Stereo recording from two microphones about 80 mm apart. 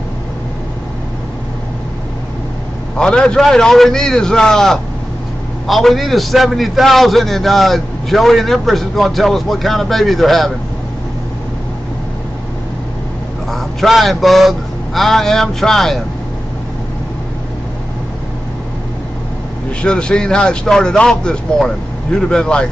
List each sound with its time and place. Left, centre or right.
3.0 s a man's voice: centre
13.5 s a man's voice: centre
19.8 s speech: centre